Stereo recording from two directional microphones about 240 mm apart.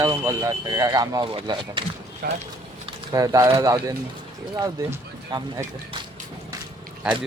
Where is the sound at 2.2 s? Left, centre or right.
Right.